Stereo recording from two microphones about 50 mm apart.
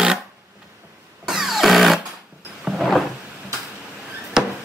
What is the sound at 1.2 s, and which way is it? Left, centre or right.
Music, centre.